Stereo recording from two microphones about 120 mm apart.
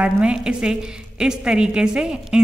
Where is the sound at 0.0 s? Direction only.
10° right (ahead or behind).